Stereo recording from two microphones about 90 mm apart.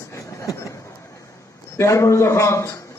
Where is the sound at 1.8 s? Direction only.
35° left (ahead or behind).